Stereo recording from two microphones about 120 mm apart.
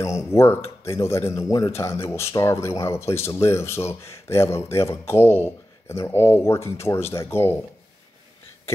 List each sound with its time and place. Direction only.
0.0 s speech: 25° left (ahead or behind)